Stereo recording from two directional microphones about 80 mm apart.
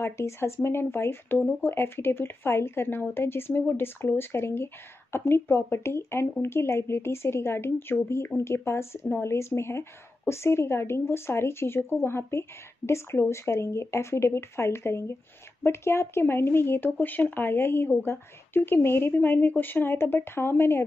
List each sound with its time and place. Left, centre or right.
0.0 s speech: left